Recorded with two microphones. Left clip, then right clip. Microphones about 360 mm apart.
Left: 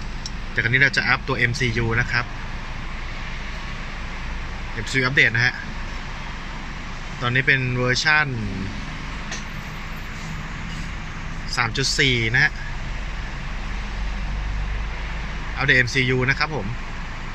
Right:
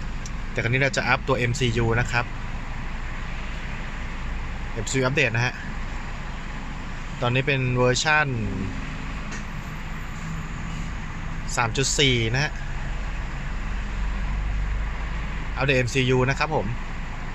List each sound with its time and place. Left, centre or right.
0.6 s speech: centre
4.9 s speech: centre
7.2 s speech: centre
11.5 s speech: centre
15.5 s speech: centre